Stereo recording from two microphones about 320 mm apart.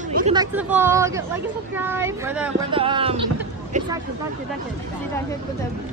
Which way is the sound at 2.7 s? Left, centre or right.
Centre.